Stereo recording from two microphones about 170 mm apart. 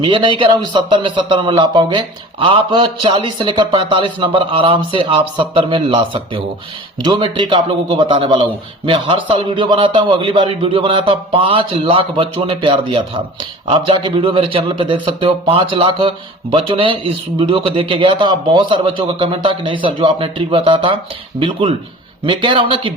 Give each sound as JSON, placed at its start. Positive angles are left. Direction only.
{"t": 0.0, "sound": "a man's voice", "side_deg": -30}